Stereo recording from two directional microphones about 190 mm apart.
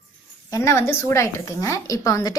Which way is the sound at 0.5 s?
15° left (ahead or behind).